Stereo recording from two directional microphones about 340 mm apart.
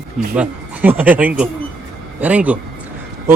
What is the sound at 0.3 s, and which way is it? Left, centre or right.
Speech, centre.